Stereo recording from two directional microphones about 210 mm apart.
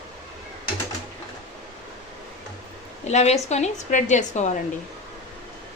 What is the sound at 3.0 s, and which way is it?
A woman's voice, 30° left (ahead or behind).